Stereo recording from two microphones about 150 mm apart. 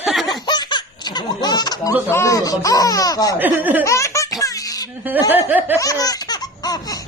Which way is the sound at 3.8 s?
20° left (ahead or behind).